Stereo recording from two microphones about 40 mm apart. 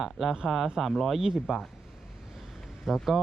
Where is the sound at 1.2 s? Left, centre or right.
Centre.